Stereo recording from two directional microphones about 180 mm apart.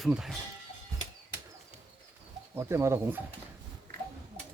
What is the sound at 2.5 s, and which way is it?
Speech, 15° right (ahead or behind).